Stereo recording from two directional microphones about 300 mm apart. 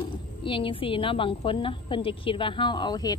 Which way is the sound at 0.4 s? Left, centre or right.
Centre.